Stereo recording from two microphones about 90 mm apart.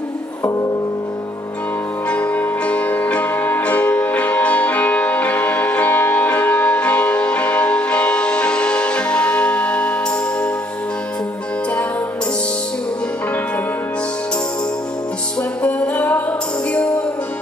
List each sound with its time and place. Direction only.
0.4 s music: 35° left (ahead or behind)
2.0 s music: 15° left (ahead or behind)
15.6 s music: 15° left (ahead or behind)